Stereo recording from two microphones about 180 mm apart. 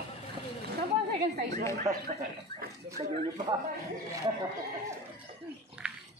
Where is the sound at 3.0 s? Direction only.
35° right (ahead or behind).